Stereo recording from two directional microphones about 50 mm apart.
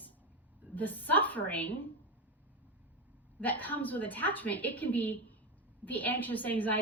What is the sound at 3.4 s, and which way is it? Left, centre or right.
A woman's voice, left.